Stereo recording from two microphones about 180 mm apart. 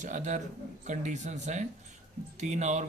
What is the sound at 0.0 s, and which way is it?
A man's voice, 45° right (ahead or behind).